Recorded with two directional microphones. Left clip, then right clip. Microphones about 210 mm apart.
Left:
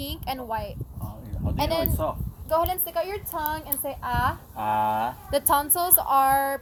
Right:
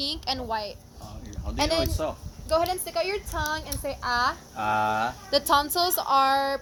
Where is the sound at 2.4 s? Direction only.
20° right (ahead or behind).